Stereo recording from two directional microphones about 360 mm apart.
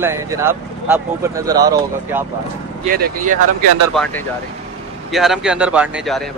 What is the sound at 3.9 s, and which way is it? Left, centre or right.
A man's voice, centre.